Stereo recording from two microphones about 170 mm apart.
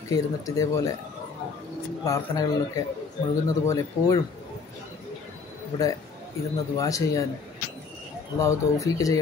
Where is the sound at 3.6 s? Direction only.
20° left (ahead or behind).